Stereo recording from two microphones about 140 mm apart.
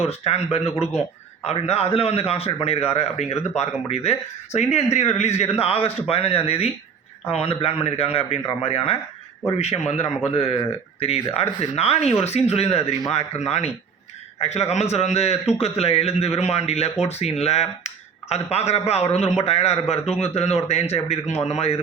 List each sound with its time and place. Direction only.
0.0 s a man's voice: 50° left (ahead or behind)